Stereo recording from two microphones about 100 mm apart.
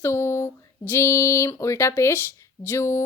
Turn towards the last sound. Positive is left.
turn(degrees=25)  # may be behind; listen again after turning